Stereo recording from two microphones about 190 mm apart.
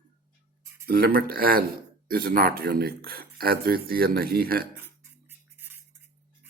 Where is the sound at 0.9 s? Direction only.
50° right (ahead or behind).